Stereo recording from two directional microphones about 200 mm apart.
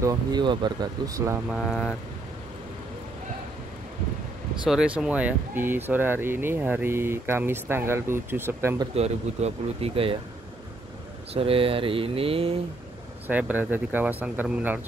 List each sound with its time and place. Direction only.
0.0 s speech: 20° right (ahead or behind)
1.7 s speech: 5° left (ahead or behind)
4.6 s speech: 5° right (ahead or behind)
8.9 s speech: 30° right (ahead or behind)
11.3 s mantra: 30° right (ahead or behind)
13.3 s speech: 10° right (ahead or behind)